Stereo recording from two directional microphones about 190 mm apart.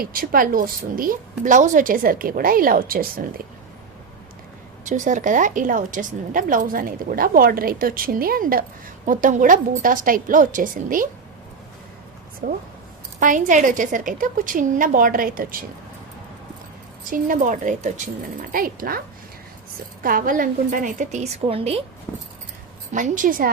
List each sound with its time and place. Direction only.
0.0 s a woman's voice: 50° right (ahead or behind)
4.9 s a woman's voice: 40° right (ahead or behind)
12.4 s a woman's voice: 45° right (ahead or behind)
17.1 s a woman's voice: 45° right (ahead or behind)
21.4 s speech: 30° right (ahead or behind)
22.1 s keys jangling: 15° left (ahead or behind)
22.9 s a woman's voice: 40° right (ahead or behind)